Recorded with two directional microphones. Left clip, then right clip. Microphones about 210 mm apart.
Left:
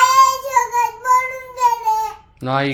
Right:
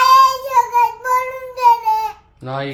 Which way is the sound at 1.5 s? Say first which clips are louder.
Right 3 dB; 5° left (ahead or behind).